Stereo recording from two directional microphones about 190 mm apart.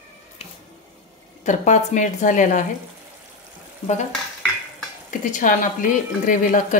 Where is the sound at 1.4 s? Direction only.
40° left (ahead or behind).